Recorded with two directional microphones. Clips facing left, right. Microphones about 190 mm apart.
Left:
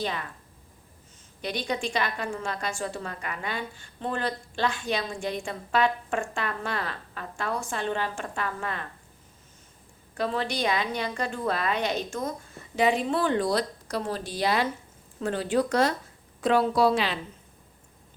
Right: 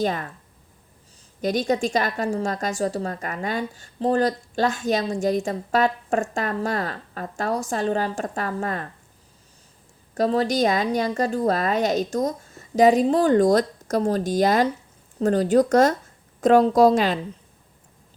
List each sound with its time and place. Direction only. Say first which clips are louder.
0.0 s speech: right 7 dB; 45° right (ahead or behind)
1.4 s a woman's voice: right 8 dB; 45° right (ahead or behind)
10.2 s a woman's voice: right 8 dB; 40° right (ahead or behind)